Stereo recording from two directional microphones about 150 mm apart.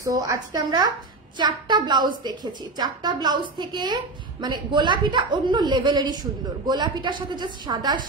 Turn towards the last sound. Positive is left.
turn(degrees=-30)  # may be behind; listen again after turning